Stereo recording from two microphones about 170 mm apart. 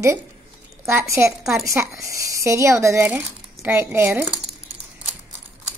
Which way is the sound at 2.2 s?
20° right (ahead or behind).